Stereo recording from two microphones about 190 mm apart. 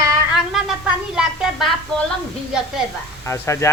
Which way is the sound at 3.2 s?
15° left (ahead or behind).